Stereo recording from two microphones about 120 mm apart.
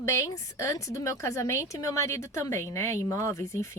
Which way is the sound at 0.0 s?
20° left (ahead or behind).